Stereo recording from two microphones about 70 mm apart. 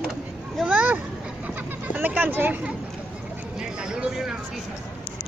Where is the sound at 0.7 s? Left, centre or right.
Right.